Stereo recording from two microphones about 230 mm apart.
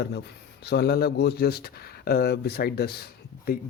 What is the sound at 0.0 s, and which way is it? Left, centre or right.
A man's voice, left.